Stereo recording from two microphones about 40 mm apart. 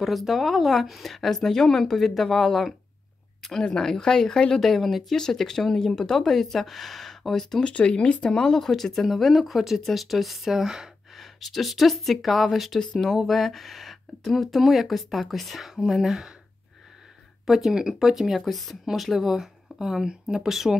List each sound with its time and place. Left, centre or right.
0.0 s speech: centre
3.6 s speech: centre
4.5 s speech: centre
7.6 s speech: left
8.3 s speech: centre
11.1 s speech: centre
12.7 s speech: centre
13.0 s speech: centre
17.5 s speech: centre